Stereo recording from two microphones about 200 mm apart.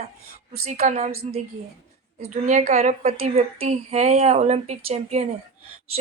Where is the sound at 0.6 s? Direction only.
35° right (ahead or behind).